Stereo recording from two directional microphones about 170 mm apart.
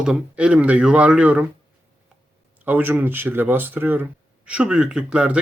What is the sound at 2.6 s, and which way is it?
A man's voice, 10° right (ahead or behind).